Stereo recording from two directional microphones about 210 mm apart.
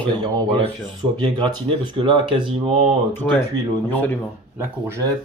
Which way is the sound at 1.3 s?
20° right (ahead or behind).